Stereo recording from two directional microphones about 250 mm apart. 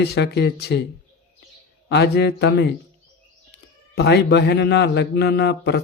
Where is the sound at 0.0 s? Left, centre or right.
Left.